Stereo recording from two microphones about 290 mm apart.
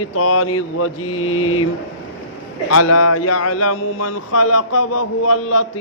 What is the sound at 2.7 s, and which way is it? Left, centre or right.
Speech, left.